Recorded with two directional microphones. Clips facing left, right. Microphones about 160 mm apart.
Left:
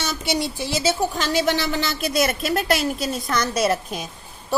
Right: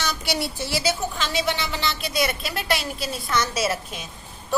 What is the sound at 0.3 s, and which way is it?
Speech, 20° left (ahead or behind).